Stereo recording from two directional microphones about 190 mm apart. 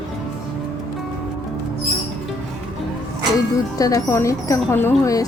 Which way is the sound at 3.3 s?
20° left (ahead or behind).